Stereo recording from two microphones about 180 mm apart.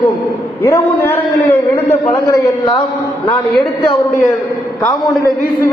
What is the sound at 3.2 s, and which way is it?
Speech, 30° left (ahead or behind).